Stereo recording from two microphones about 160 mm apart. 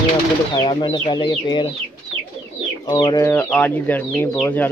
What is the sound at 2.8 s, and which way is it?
Speech, 25° left (ahead or behind).